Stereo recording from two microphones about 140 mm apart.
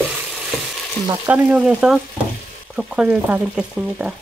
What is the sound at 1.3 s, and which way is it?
Frying, 10° right (ahead or behind).